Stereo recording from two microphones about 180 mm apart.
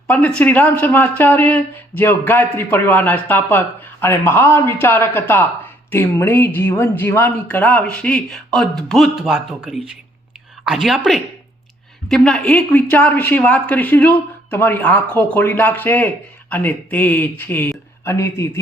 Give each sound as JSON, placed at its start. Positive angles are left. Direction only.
{"t": 0.1, "sound": "a woman's voice", "side_deg": 5}